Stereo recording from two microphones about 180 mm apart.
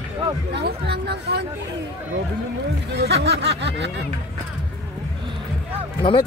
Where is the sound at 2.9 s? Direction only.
65° right (ahead or behind).